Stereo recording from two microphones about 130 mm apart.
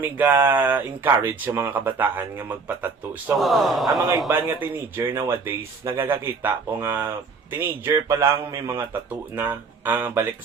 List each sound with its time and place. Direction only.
0.0 s speech: 15° right (ahead or behind)
3.3 s speech: centre (ahead or behind)
4.4 s speech: 15° right (ahead or behind)